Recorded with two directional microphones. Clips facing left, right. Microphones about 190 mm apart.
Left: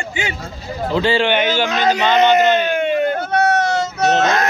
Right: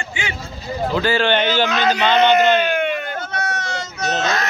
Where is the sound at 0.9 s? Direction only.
25° left (ahead or behind).